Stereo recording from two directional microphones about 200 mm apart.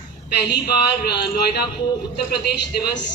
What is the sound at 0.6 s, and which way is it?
A man's voice, 55° left (ahead or behind).